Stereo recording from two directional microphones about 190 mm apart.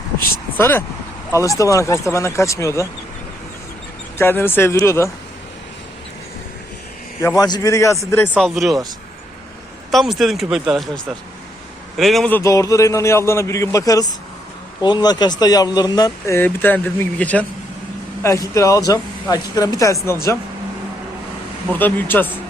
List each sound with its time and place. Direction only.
0.5 s speech: 10° left (ahead or behind)
4.2 s speech: 10° left (ahead or behind)
7.2 s speech: 15° left (ahead or behind)
8.4 s speech: centre (ahead or behind)
9.9 s speech: centre (ahead or behind)
12.4 s speech: 15° left (ahead or behind)
21.7 s speech: 10° left (ahead or behind)